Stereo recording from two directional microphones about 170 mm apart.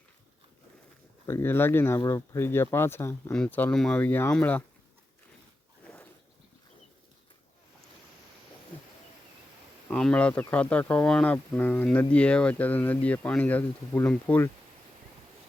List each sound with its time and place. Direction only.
1.3 s speech: 15° left (ahead or behind)
9.9 s speech: 5° left (ahead or behind)